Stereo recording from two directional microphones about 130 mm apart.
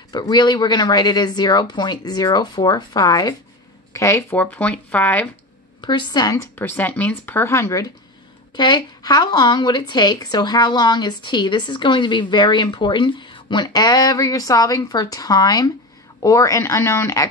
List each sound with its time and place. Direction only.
0.1 s speech: 30° left (ahead or behind); by 5.3 s 10° left (ahead or behind)
5.8 s speech: 35° left (ahead or behind)